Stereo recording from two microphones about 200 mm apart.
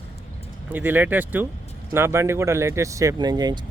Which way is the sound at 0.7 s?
10° right (ahead or behind).